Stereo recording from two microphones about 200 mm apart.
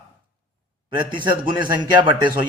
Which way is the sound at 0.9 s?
25° right (ahead or behind).